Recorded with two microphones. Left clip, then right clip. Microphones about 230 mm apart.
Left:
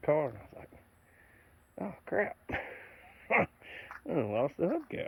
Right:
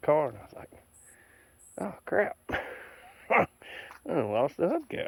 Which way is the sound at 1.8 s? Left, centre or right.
Right.